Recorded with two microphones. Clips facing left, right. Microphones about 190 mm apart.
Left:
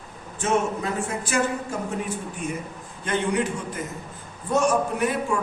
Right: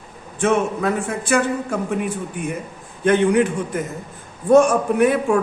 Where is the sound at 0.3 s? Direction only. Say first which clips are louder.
Right 5 dB; 60° right (ahead or behind).